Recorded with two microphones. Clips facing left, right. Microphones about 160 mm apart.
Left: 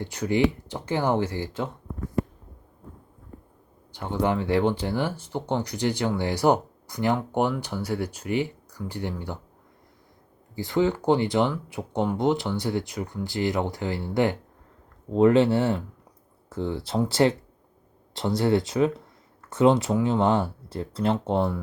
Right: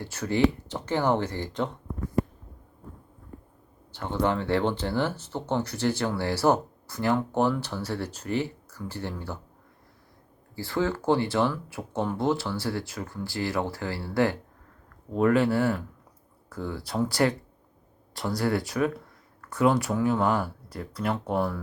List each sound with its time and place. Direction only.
0.0 s speech: 15° left (ahead or behind)
3.9 s speech: 15° left (ahead or behind)
10.5 s speech: 20° left (ahead or behind)